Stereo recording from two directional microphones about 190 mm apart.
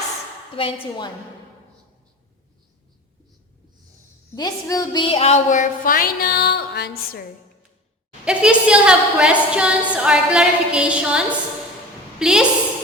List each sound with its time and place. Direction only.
0.5 s a woman's voice: 25° left (ahead or behind)
4.4 s a woman's voice: 20° left (ahead or behind); by 6.9 s 60° left (ahead or behind)
8.2 s a woman's voice: 5° right (ahead or behind)
12.2 s a woman's voice: 5° right (ahead or behind)